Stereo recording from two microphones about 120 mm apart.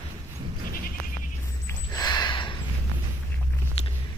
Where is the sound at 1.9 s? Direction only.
35° left (ahead or behind).